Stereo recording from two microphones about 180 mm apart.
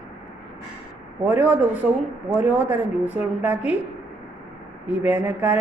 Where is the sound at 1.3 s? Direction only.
10° right (ahead or behind).